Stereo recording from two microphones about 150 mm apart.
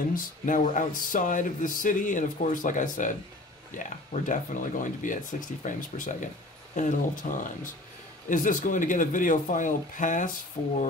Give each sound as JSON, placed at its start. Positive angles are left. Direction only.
{"t": 0.1, "sound": "speech", "side_deg": 60}